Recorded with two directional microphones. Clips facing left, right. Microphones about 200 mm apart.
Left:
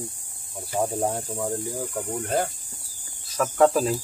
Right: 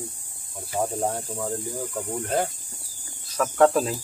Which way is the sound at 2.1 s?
Centre (ahead or behind).